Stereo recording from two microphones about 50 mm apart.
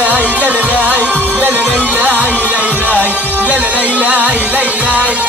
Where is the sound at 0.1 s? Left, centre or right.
Right.